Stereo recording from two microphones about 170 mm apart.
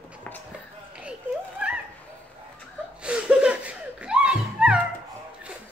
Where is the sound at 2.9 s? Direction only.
5° right (ahead or behind).